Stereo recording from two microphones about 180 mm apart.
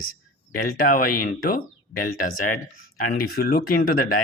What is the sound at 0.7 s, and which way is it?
Speech, 50° left (ahead or behind).